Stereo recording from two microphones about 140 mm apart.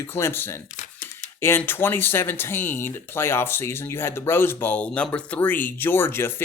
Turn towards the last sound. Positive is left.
turn(degrees=15)  # may be behind; listen again after turning